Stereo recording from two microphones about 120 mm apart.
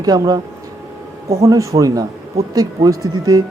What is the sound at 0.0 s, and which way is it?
Speech, 30° right (ahead or behind).